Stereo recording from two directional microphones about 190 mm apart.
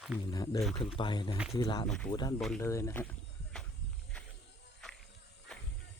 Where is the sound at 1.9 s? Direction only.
5° left (ahead or behind).